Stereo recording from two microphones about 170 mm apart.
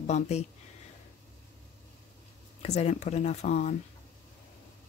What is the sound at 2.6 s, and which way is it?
Speech, 40° left (ahead or behind).